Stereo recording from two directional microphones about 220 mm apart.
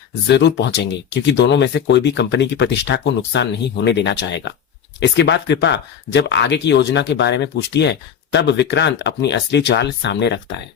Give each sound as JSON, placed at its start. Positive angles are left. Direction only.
{"t": 0.1, "sound": "speech", "side_deg": 50}